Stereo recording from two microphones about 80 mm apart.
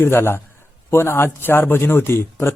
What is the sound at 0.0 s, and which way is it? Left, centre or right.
A man's voice, left.